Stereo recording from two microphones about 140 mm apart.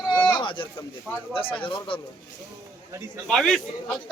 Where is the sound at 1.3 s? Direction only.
40° left (ahead or behind).